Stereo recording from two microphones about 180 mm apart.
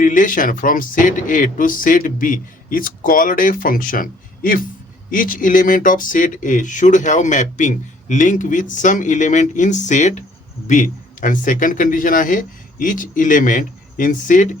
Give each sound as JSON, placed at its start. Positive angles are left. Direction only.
{"t": 0.0, "sound": "speech", "side_deg": 45}